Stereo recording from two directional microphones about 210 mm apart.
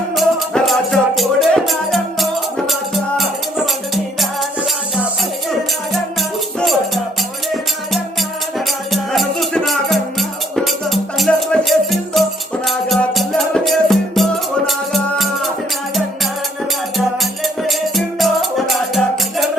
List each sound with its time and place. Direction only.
0.2 s music: centre (ahead or behind)
5.5 s music: centre (ahead or behind)
8.5 s music: centre (ahead or behind)
17.4 s music: centre (ahead or behind)